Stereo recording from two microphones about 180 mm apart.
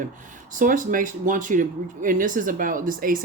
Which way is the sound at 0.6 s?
45° right (ahead or behind).